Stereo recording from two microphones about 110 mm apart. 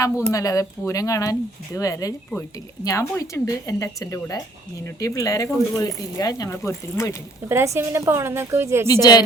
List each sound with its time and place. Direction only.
0.0 s speech: 30° left (ahead or behind)
7.4 s a woman's voice: 25° right (ahead or behind)
8.9 s speech: 35° left (ahead or behind)